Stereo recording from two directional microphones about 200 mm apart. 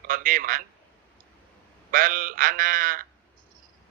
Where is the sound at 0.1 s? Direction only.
45° right (ahead or behind).